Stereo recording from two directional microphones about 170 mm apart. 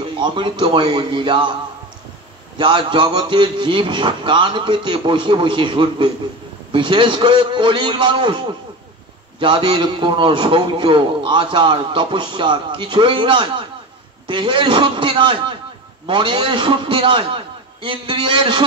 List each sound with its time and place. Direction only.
0.2 s a man's voice: 30° right (ahead or behind)